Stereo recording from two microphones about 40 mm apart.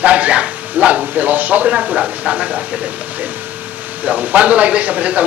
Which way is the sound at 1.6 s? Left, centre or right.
Right.